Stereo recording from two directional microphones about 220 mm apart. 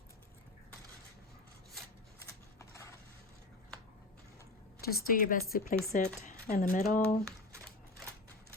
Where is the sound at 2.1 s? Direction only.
15° left (ahead or behind).